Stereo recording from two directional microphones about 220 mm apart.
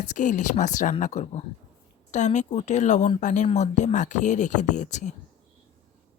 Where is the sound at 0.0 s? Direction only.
35° left (ahead or behind).